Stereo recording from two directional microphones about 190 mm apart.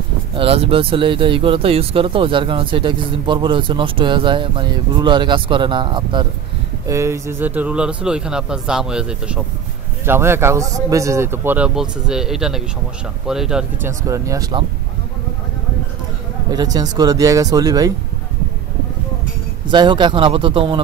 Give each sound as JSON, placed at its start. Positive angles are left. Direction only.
{"t": 0.4, "sound": "speech", "side_deg": -30}
{"t": 13.8, "sound": "speech", "side_deg": -15}
{"t": 16.4, "sound": "speech", "side_deg": -20}
{"t": 19.7, "sound": "speech", "side_deg": -25}